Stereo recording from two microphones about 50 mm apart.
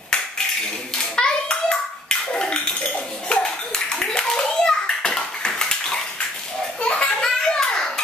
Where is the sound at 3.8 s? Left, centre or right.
Centre.